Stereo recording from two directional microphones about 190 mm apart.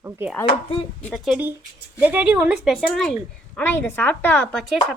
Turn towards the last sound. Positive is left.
turn(degrees=0)  # may be behind; listen again after turning